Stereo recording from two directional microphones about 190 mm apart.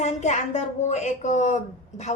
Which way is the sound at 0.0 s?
40° left (ahead or behind).